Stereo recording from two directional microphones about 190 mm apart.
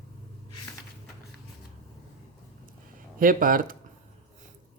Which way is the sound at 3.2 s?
45° right (ahead or behind).